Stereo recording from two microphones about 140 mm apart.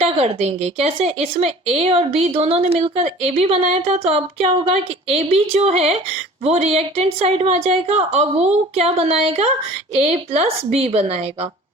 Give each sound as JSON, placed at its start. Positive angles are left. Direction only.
{"t": 0.2, "sound": "speech", "side_deg": -45}